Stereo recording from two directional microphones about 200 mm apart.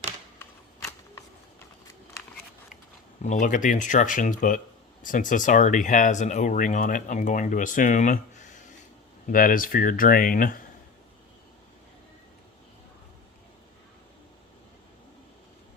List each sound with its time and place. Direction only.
3.2 s speech: 40° left (ahead or behind)
9.3 s speech: 45° left (ahead or behind)